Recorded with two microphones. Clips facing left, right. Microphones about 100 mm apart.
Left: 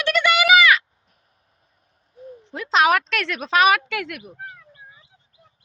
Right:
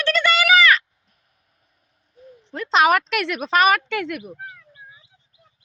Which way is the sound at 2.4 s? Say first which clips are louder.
Right 1 dB; 5° left (ahead or behind).